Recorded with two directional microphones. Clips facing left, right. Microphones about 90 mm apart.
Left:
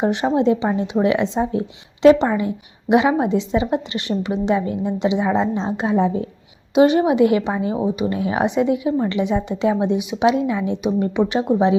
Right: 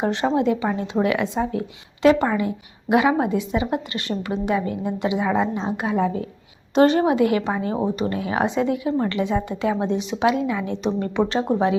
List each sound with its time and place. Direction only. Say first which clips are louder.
0.0 s a woman's voice: left 3 dB; 20° left (ahead or behind)
6.7 s a woman's voice: left 2 dB; 15° left (ahead or behind)
7.8 s a woman's voice: left 2 dB; 10° left (ahead or behind)
8.1 s a woman's voice: left 3 dB; 20° left (ahead or behind)
11.5 s speech: left 6 dB; 55° right (ahead or behind)